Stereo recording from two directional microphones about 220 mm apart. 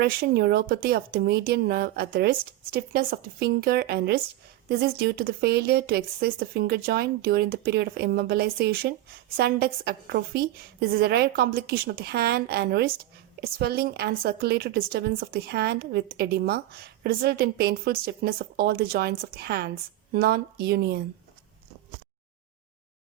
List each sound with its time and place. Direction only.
0.0 s speech: 45° right (ahead or behind)